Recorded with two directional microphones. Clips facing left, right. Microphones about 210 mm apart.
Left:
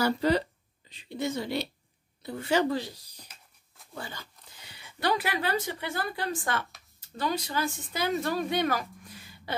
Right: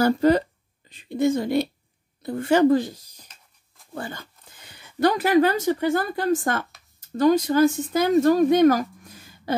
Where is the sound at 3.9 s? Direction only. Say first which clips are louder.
Right 7 dB; 50° right (ahead or behind).